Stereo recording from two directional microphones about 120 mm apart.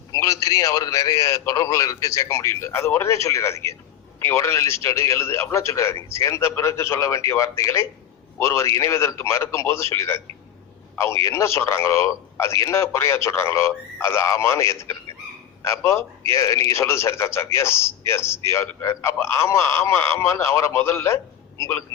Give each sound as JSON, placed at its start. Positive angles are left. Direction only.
{"t": 0.1, "sound": "a man's voice", "side_deg": 25}